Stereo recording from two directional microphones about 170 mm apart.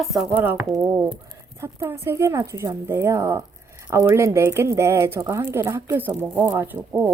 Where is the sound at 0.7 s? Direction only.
15° right (ahead or behind).